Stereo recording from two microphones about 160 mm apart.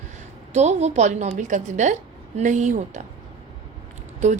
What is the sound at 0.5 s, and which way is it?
A woman's voice, 45° right (ahead or behind).